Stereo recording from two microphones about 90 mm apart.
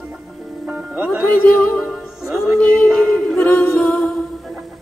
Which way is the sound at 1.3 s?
15° left (ahead or behind).